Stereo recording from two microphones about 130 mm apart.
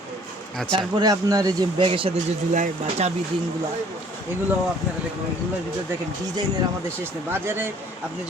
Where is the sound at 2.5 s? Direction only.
70° right (ahead or behind).